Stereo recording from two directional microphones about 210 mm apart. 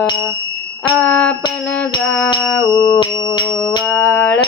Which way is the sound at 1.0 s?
5° left (ahead or behind).